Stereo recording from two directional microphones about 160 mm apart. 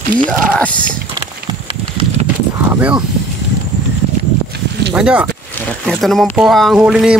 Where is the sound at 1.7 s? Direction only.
35° right (ahead or behind).